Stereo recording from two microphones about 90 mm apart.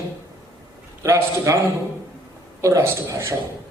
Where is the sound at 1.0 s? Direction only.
35° right (ahead or behind).